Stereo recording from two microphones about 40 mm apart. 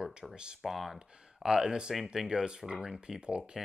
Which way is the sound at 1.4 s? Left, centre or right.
Centre.